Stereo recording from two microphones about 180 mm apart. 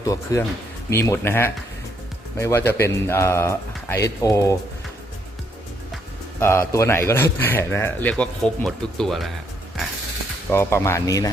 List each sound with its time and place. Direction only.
0.0 s speech: 20° left (ahead or behind)
6.4 s speech: 15° left (ahead or behind)
10.5 s speech: 15° left (ahead or behind)